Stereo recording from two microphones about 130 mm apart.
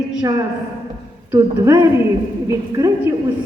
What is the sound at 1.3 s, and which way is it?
A man's voice, 25° right (ahead or behind).